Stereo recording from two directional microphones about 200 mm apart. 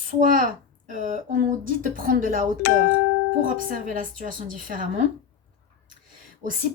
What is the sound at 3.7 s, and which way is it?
A woman's voice, 40° right (ahead or behind).